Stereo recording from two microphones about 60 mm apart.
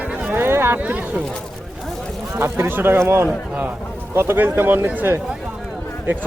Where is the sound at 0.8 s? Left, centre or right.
Right.